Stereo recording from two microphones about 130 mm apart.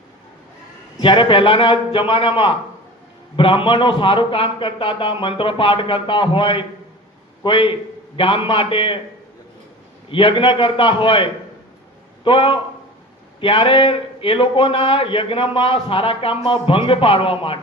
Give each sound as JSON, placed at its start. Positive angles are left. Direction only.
{"t": 1.0, "sound": "a man's voice", "side_deg": 40}
{"t": 10.1, "sound": "a man's voice", "side_deg": 45}